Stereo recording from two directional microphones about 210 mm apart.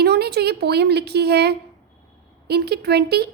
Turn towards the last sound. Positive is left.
turn(degrees=-50)  # may be behind; listen again after turning